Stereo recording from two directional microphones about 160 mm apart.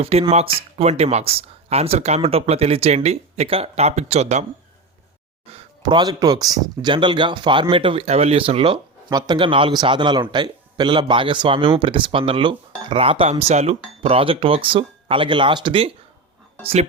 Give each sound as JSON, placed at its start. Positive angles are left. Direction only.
{"t": 0.0, "sound": "speech", "side_deg": -40}
{"t": 5.5, "sound": "speech", "side_deg": -35}